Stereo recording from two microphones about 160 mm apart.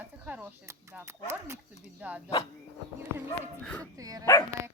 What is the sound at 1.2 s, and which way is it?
Speech, 15° right (ahead or behind).